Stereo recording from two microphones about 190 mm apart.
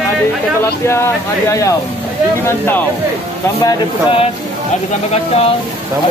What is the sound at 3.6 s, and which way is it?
Speech, 30° left (ahead or behind).